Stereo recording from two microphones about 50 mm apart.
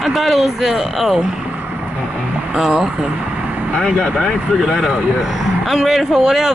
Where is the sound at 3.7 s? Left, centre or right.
Left.